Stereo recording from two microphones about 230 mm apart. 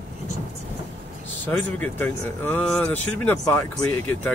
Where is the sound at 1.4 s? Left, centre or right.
Centre.